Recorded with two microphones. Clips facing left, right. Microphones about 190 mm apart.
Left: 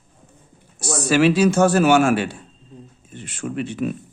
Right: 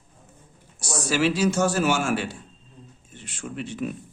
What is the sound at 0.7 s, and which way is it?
Speech, 60° left (ahead or behind).